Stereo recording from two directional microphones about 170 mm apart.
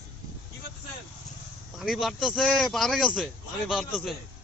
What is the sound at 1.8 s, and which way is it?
Speech, centre (ahead or behind).